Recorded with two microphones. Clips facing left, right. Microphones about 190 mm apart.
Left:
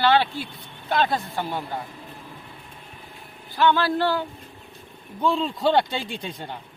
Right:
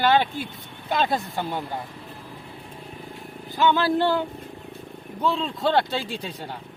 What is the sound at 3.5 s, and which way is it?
Speech, 15° right (ahead or behind).